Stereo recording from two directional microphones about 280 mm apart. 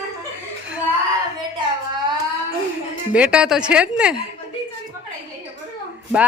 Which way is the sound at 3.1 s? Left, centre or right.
Centre.